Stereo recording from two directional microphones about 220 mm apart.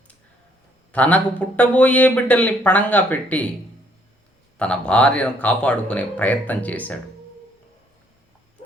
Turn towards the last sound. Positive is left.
turn(degrees=5)  # may be behind; listen again after turning